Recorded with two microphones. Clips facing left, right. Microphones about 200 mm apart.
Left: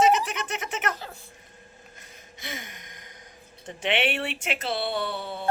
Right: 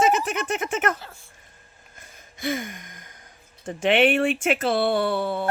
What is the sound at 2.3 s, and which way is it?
Gasp, 50° right (ahead or behind).